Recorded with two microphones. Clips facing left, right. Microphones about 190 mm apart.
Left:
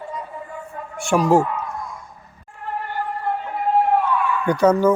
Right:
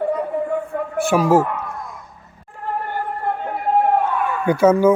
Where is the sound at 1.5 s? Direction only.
55° right (ahead or behind).